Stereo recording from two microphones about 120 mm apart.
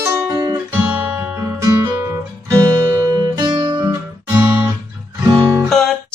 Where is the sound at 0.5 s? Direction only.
10° right (ahead or behind).